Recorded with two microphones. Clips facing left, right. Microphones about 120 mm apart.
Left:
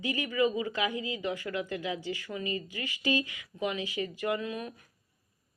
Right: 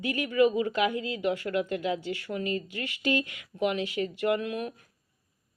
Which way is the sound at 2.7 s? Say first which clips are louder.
Right 2 dB; 65° right (ahead or behind).